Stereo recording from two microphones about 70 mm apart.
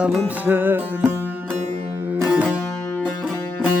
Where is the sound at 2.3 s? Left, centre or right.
Centre.